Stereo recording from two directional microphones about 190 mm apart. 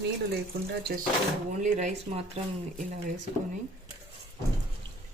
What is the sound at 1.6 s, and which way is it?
Speech, 35° right (ahead or behind).